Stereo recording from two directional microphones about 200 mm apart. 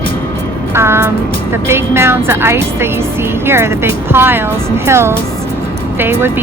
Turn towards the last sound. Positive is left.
turn(degrees=-15)  # may be behind; listen again after turning